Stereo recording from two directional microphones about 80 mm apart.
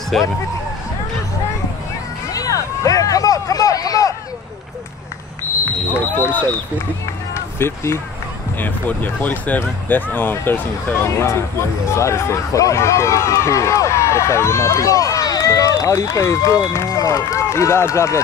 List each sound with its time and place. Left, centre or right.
0.1 s speech: centre
2.3 s a sound: left
6.1 s speech: left
7.5 s speech: left
11.1 s speech: left